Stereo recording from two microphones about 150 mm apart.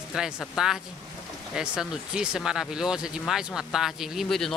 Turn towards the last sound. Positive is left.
turn(degrees=0)  # may be behind; listen again after turning